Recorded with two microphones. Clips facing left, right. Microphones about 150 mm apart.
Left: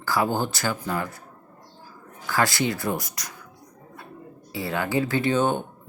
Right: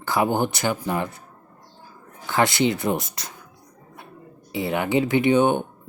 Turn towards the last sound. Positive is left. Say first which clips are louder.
# right 4 dB
turn(degrees=-15)  # may be behind; listen again after turning